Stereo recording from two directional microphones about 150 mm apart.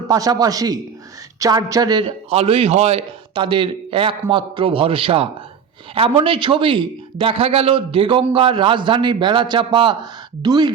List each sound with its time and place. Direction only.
0.1 s speech: 25° right (ahead or behind)
2.0 s a man's voice: 40° right (ahead or behind)
3.3 s a man's voice: 35° right (ahead or behind)